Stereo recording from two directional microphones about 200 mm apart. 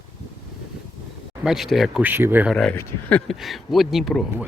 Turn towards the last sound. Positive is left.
turn(degrees=0)  # may be behind; listen again after turning